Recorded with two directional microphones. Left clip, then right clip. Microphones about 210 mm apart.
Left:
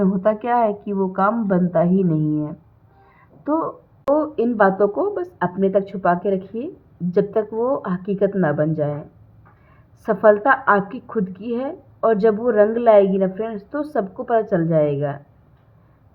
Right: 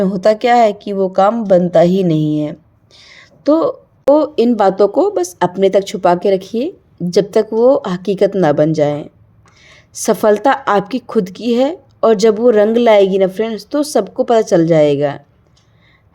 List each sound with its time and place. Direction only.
0.0 s a woman's voice: 45° right (ahead or behind)
3.1 s a sound: 45° right (ahead or behind)
4.1 s a woman's voice: 45° right (ahead or behind)
10.1 s a woman's voice: 50° right (ahead or behind)